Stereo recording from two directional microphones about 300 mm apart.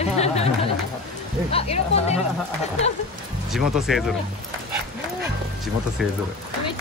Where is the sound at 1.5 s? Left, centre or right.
Centre.